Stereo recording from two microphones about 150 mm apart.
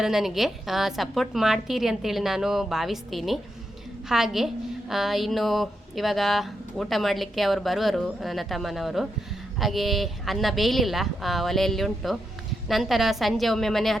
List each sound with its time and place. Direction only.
0.0 s a woman's voice: centre (ahead or behind)